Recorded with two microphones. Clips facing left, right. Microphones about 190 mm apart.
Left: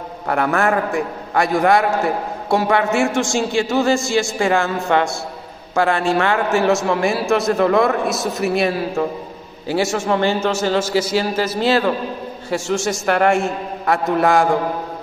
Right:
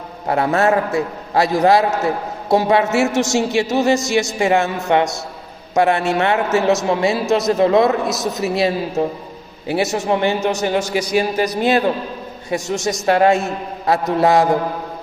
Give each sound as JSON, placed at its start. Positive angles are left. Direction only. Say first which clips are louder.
{"t": 0.3, "sound": "a man's voice", "louder": "right 2 dB", "side_deg": -25}